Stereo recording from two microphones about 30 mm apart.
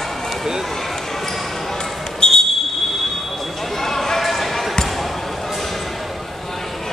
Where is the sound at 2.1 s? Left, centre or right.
Left.